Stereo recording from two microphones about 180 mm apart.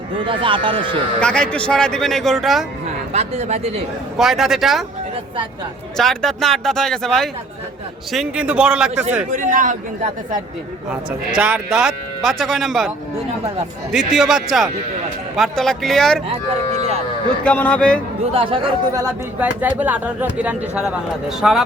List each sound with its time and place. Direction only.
0.3 s speech: 30° right (ahead or behind)
1.2 s a man's voice: 5° left (ahead or behind)
3.1 s speech: 35° right (ahead or behind)
4.2 s a man's voice: centre (ahead or behind)
6.0 s a man's voice: centre (ahead or behind)
9.3 s speech: 45° right (ahead or behind)
11.3 s a man's voice: 5° right (ahead or behind)
13.9 s a man's voice: centre (ahead or behind)
17.4 s a man's voice: 5° left (ahead or behind)
18.3 s speech: 30° right (ahead or behind)
19.4 s speech: 10° right (ahead or behind)